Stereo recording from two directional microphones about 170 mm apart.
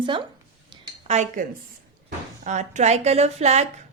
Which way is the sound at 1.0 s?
45° right (ahead or behind).